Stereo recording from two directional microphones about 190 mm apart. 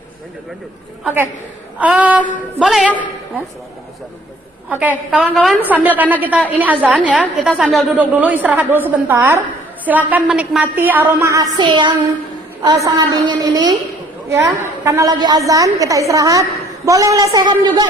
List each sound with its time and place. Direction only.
1.0 s a woman's voice: 10° right (ahead or behind)
4.7 s a woman's voice: 10° right (ahead or behind)